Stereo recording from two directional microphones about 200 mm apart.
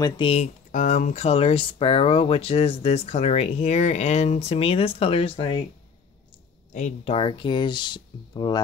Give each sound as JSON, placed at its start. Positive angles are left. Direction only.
{"t": 0.0, "sound": "speech", "side_deg": 30}
{"t": 6.7, "sound": "speech", "side_deg": 35}